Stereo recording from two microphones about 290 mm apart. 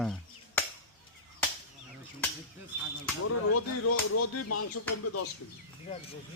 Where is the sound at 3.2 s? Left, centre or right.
Left.